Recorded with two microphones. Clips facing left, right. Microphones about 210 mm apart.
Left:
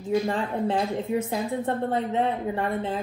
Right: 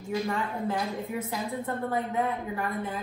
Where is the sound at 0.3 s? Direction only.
30° left (ahead or behind).